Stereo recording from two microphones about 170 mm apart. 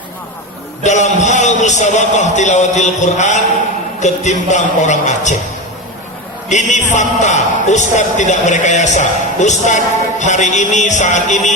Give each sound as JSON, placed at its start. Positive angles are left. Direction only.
{"t": 0.8, "sound": "a man's voice", "side_deg": 45}
{"t": 6.5, "sound": "a man's voice", "side_deg": 45}